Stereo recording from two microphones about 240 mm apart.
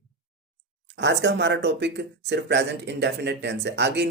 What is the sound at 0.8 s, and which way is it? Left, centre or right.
Speech, right.